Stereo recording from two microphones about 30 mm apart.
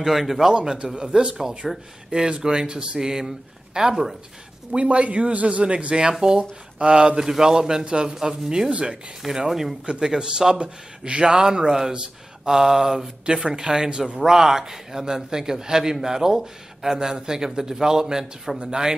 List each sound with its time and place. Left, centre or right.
0.0 s a man's voice: centre
0.9 s a man's voice: right
1.6 s speech: centre
2.0 s a man's voice: right
4.7 s a man's voice: right
6.2 s a man's voice: right
9.5 s a man's voice: centre
9.8 s a man's voice: right
10.6 s speech: right
11.2 s a man's voice: right